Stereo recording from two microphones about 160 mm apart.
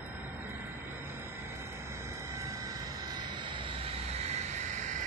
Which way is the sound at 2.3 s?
20° right (ahead or behind).